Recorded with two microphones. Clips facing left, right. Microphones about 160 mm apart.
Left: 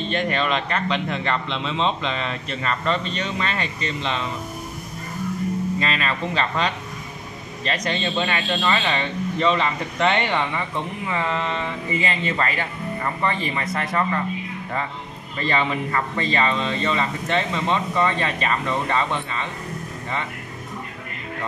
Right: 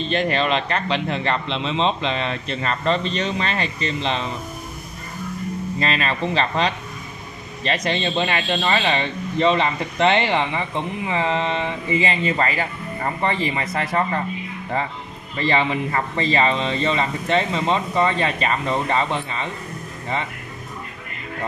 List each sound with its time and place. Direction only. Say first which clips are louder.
0.3 s speech: right 2 dB; 35° right (ahead or behind)
5.8 s speech: right 2 dB; 35° right (ahead or behind)
7.8 s speech: right 1 dB; 25° right (ahead or behind)
15.3 s speech: right 2 dB; 25° right (ahead or behind)